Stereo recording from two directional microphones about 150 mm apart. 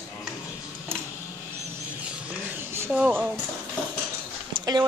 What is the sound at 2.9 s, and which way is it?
Speech, 5° right (ahead or behind).